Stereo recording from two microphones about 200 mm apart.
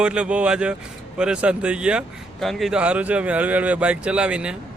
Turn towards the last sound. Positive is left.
turn(degrees=-5)  # may be behind; listen again after turning